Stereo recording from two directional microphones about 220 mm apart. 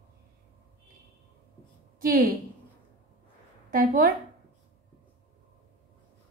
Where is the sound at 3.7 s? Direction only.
40° right (ahead or behind).